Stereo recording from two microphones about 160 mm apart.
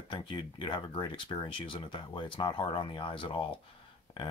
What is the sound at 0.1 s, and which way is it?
Speech, 30° left (ahead or behind).